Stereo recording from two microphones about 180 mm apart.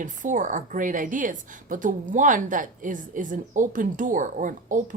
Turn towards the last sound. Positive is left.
turn(degrees=-45)  # may be behind; listen again after turning